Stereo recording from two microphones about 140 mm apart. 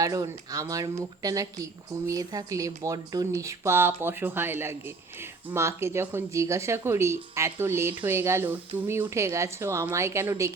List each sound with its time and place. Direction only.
0.0 s a woman's voice: 25° right (ahead or behind)